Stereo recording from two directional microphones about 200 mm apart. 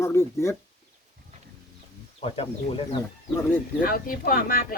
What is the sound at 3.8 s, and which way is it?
Speech, 45° left (ahead or behind).